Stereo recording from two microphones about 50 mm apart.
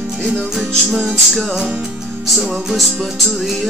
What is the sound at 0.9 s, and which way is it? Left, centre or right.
Music, centre.